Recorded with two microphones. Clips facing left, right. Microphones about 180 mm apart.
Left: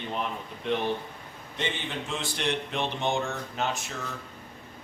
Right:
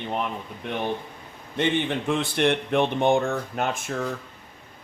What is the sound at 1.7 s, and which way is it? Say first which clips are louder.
Speech: right 9 dB; 60° right (ahead or behind).